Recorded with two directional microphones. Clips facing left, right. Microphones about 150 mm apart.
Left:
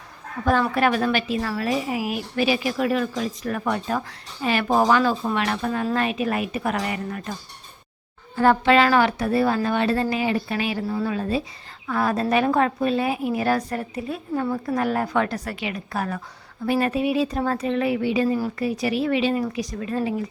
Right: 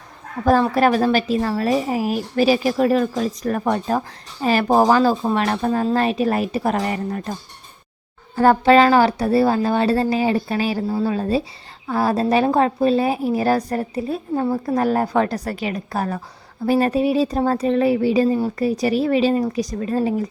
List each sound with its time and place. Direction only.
0.4 s a woman's voice: 35° right (ahead or behind)
8.4 s a woman's voice: 40° right (ahead or behind)